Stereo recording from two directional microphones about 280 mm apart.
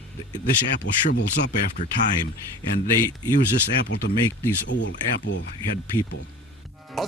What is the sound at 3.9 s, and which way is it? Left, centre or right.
Speech, left.